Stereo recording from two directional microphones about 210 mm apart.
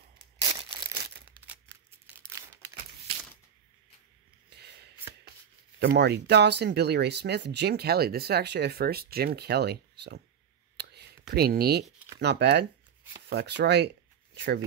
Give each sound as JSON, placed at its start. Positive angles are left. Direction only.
{"t": 2.2, "sound": "crumpling", "side_deg": -15}
{"t": 4.5, "sound": "a sound", "side_deg": -50}
{"t": 5.8, "sound": "speech", "side_deg": -55}
{"t": 10.8, "sound": "whispering", "side_deg": -50}
{"t": 12.2, "sound": "speech", "side_deg": -55}